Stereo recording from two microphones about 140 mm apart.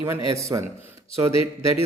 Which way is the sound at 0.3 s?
20° right (ahead or behind).